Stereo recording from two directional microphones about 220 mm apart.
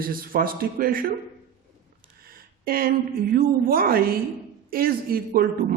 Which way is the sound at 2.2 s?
40° right (ahead or behind).